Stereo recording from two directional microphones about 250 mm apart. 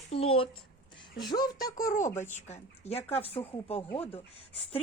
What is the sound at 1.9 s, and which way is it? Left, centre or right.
Speech, left.